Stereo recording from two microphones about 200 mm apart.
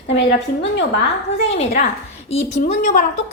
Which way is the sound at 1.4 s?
30° left (ahead or behind).